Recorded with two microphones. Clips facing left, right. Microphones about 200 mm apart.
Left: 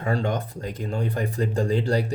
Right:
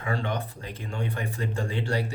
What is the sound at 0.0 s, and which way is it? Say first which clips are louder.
Speech: left 5 dB; 40° left (ahead or behind).